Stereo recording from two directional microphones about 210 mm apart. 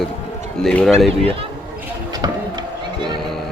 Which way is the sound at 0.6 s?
Centre (ahead or behind).